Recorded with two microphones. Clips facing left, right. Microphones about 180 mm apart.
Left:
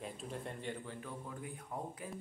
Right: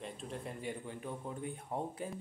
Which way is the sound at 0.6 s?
15° right (ahead or behind).